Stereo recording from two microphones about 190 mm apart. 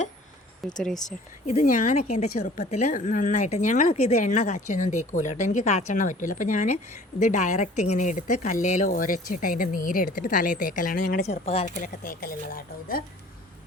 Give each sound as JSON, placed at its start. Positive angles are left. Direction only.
{"t": 0.8, "sound": "speech", "side_deg": 5}
{"t": 1.0, "sound": "speech", "side_deg": 40}
{"t": 11.4, "sound": "speech", "side_deg": 35}